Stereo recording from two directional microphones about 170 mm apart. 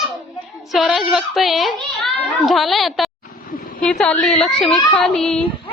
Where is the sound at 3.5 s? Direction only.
55° left (ahead or behind).